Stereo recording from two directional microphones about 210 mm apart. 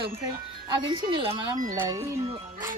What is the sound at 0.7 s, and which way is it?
A woman's voice, 20° right (ahead or behind).